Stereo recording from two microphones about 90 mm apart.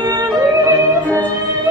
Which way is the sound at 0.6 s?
40° right (ahead or behind).